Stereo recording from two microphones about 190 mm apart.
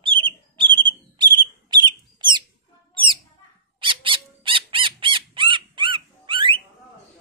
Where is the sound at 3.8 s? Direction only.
25° right (ahead or behind).